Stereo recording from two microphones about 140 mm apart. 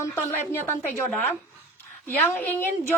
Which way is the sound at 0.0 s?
15° left (ahead or behind).